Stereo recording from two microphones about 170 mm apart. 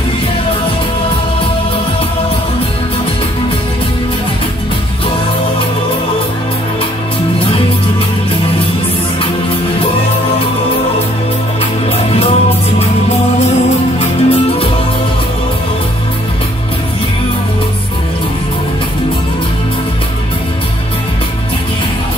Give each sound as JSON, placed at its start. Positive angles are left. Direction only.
{"t": 12.2, "sound": "music", "side_deg": 35}
{"t": 13.9, "sound": "music", "side_deg": 35}